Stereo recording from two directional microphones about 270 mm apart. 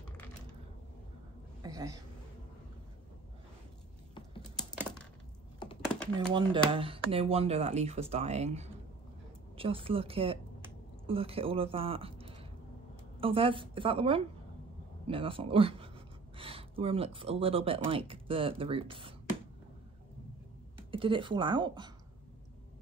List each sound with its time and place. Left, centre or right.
1.6 s a sound: centre
4.6 s computer keyboard: centre
6.1 s a man's voice: centre
20.9 s speech: centre